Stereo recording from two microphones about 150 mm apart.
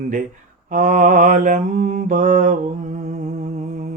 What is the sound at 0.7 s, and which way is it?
Mantra, 60° right (ahead or behind).